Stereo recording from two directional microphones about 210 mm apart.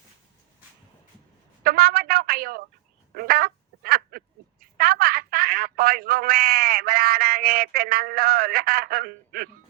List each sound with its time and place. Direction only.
1.6 s a sound: 45° right (ahead or behind)
3.2 s quack: 45° right (ahead or behind)
4.6 s telephone: 45° right (ahead or behind)